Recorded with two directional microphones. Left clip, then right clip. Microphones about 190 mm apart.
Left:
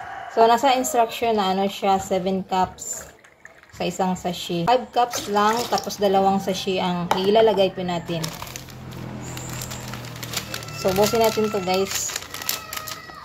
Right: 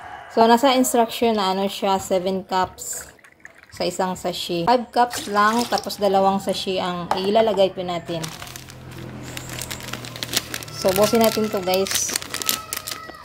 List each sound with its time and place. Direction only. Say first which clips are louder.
0.3 s speech: right 1 dB; 40° right (ahead or behind)
3.7 s speech: right 1 dB; 40° right (ahead or behind)
10.8 s speech: right 2 dB; 45° right (ahead or behind)